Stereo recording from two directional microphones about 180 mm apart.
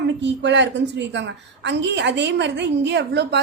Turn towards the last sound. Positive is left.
turn(degrees=-70)  # may be behind; listen again after turning